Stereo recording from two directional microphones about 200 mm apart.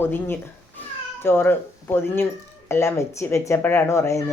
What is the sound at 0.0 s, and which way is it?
Speech, 10° left (ahead or behind).